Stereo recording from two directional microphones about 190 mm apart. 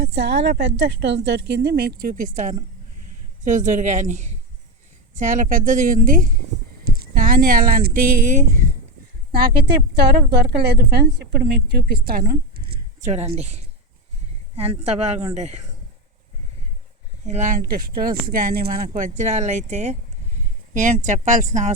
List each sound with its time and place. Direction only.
0.0 s a woman's voice: 60° right (ahead or behind); by 8.7 s 40° right (ahead or behind)
9.3 s a woman's voice: 50° right (ahead or behind)
13.1 s speech: 35° right (ahead or behind)
17.2 s speech: 40° right (ahead or behind)